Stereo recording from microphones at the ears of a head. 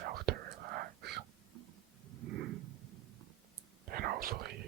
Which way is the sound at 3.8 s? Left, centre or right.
Right.